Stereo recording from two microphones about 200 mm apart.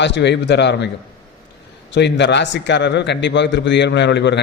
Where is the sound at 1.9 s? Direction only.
60° left (ahead or behind).